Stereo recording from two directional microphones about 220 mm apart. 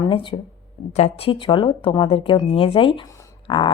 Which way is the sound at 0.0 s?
20° left (ahead or behind).